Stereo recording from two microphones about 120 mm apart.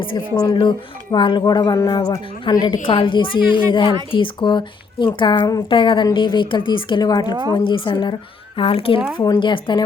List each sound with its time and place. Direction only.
0.3 s speech: 30° left (ahead or behind)
2.8 s a woman's voice: 45° left (ahead or behind)
8.5 s a woman's voice: 50° left (ahead or behind)
9.1 s speech: 35° left (ahead or behind)